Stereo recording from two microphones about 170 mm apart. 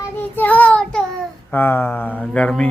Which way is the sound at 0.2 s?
10° left (ahead or behind).